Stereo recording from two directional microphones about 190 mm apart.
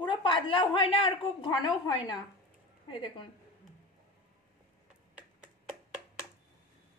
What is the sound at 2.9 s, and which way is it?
Speech, 25° left (ahead or behind).